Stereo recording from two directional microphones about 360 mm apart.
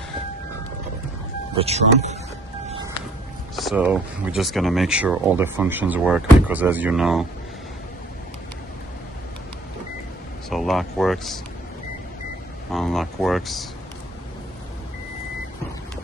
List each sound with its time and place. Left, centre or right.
1.6 s speech: centre
3.5 s speech: centre
10.5 s speech: centre
12.7 s speech: centre